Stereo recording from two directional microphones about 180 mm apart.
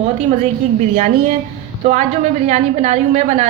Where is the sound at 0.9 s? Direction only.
40° right (ahead or behind).